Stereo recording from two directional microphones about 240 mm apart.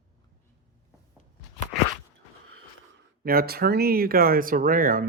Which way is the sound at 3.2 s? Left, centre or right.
Right.